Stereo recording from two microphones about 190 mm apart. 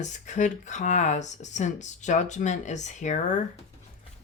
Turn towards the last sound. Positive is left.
turn(degrees=40)  # may be behind; listen again after turning